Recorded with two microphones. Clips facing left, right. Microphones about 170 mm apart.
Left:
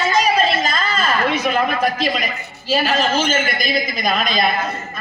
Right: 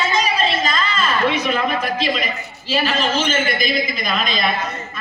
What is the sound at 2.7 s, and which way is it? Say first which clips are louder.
Speech: left 2 dB; 40° left (ahead or behind).